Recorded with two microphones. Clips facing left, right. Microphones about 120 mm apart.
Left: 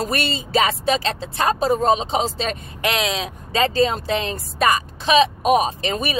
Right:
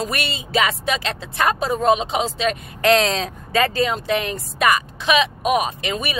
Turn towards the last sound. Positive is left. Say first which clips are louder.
# left 2 dB
turn(degrees=35)  # may be behind; listen again after turning